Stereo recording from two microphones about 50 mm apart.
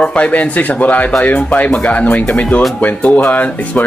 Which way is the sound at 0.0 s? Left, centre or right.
Left.